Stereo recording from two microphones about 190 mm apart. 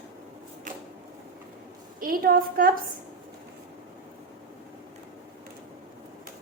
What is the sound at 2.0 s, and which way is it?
Speech, 50° right (ahead or behind).